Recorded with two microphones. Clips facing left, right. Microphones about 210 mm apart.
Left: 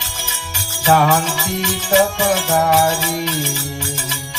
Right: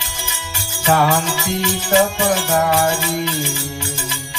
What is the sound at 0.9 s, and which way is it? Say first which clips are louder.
Music: left 1 dB; 20° left (ahead or behind).